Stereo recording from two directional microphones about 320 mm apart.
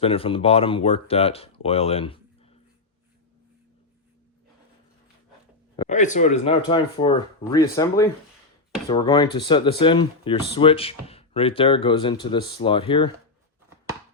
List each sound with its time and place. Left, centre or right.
0.0 s speech: centre
5.7 s speech: centre